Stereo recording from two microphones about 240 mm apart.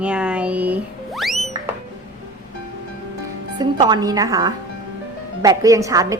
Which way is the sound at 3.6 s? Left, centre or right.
Centre.